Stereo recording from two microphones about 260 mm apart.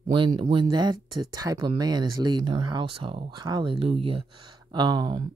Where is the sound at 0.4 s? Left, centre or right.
Centre.